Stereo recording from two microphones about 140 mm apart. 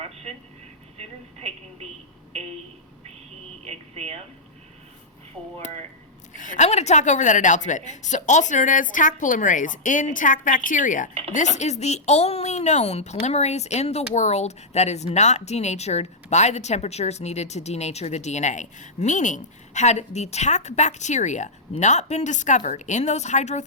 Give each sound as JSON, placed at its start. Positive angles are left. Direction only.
{"t": 0.9, "sound": "telephone", "side_deg": -50}
{"t": 3.6, "sound": "a sound", "side_deg": -50}
{"t": 5.4, "sound": "speech", "side_deg": 0}
{"t": 6.3, "sound": "a woman's voice", "side_deg": 65}
{"t": 11.3, "sound": "speech", "side_deg": 55}